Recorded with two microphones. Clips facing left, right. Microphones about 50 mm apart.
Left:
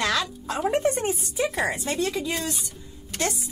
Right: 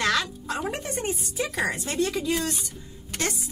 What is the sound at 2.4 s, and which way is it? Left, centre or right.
Speech, right.